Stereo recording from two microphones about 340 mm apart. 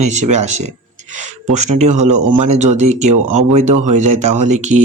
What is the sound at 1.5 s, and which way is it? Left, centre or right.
Speech, right.